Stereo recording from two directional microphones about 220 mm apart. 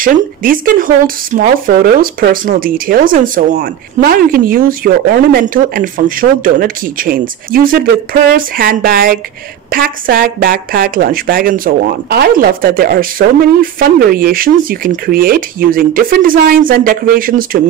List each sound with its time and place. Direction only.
0.0 s speech: 40° right (ahead or behind)